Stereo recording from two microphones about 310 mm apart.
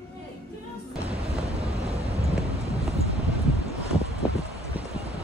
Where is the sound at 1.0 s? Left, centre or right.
Centre.